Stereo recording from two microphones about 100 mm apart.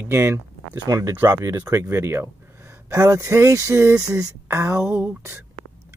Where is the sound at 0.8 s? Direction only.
40° right (ahead or behind).